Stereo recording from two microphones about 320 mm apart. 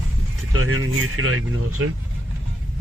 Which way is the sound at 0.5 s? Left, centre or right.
Right.